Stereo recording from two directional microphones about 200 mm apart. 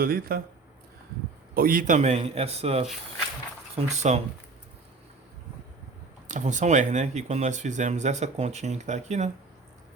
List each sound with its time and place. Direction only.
0.0 s speech: 45° right (ahead or behind)
1.5 s speech: 45° right (ahead or behind)
3.9 s speech: 35° right (ahead or behind)
6.2 s speech: 35° right (ahead or behind)